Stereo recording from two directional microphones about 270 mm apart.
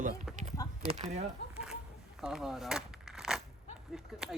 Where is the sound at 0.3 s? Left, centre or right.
Centre.